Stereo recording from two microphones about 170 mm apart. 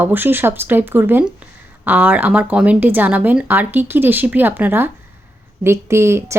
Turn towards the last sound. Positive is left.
turn(degrees=-15)  # may be behind; listen again after turning